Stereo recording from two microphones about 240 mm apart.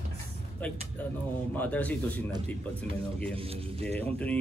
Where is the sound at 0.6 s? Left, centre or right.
Centre.